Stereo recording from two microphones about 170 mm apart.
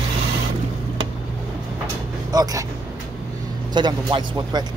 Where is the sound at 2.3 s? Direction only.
20° right (ahead or behind).